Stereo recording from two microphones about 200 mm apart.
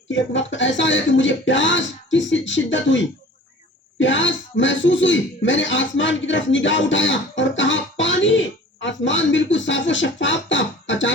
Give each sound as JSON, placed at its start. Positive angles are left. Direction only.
{"t": 0.1, "sound": "speech", "side_deg": 70}